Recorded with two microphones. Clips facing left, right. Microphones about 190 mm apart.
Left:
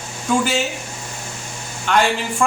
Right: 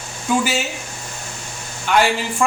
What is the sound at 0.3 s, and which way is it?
Speech, 5° right (ahead or behind).